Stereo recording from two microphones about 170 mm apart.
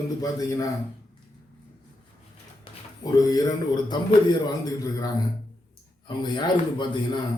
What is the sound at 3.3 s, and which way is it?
A man's voice, 20° left (ahead or behind).